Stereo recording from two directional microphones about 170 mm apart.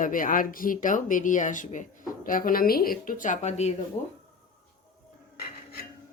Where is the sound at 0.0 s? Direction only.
50° left (ahead or behind).